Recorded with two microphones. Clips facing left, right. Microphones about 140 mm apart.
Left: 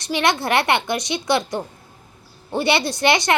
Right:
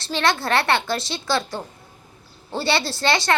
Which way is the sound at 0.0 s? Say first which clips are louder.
Left 2 dB; 15° left (ahead or behind).